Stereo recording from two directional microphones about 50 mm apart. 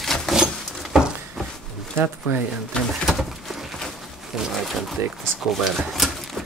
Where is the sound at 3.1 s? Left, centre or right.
Centre.